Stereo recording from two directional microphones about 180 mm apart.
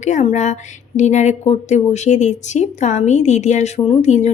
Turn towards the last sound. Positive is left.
turn(degrees=40)  # may be behind; listen again after turning